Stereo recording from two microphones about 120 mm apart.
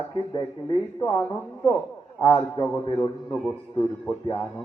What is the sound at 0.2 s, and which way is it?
Speech, 40° left (ahead or behind).